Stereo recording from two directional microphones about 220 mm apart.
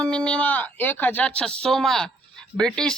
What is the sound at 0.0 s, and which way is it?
Speech, 5° left (ahead or behind).